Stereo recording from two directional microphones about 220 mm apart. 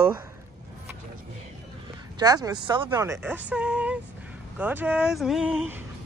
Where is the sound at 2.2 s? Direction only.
15° right (ahead or behind).